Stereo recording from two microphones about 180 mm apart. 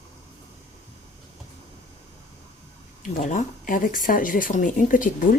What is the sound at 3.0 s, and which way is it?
Speech, 45° left (ahead or behind).